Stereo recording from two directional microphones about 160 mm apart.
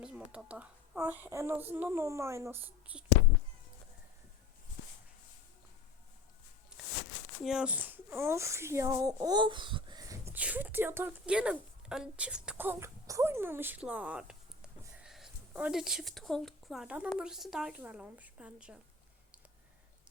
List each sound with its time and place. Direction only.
0.0 s speech: 5° right (ahead or behind)
6.8 s a sound: centre (ahead or behind)
7.4 s speech: 5° right (ahead or behind); by 10.2 s 30° right (ahead or behind)
10.2 s a woman's voice: 10° right (ahead or behind)